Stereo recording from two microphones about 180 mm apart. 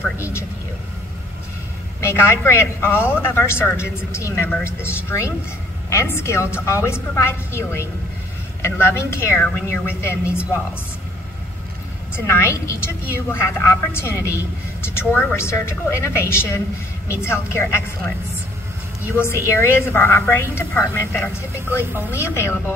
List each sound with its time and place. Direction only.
0.2 s a woman's voice: 15° left (ahead or behind)
2.0 s a woman's voice: 15° left (ahead or behind)
12.2 s a woman's voice: 15° left (ahead or behind)
19.1 s a woman's voice: 15° left (ahead or behind)